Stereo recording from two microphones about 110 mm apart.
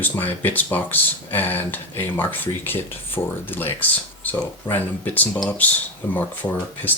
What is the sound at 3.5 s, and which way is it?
Speech, 15° left (ahead or behind).